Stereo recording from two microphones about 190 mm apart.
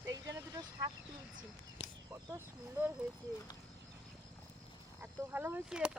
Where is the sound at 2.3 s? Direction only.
10° right (ahead or behind).